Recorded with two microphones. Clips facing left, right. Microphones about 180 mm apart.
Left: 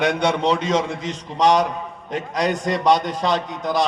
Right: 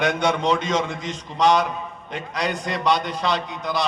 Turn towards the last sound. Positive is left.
turn(degrees=45)  # may be behind; listen again after turning